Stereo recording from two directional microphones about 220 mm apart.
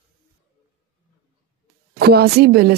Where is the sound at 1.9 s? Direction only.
45° right (ahead or behind).